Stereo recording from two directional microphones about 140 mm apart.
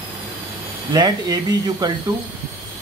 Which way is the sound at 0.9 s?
30° right (ahead or behind).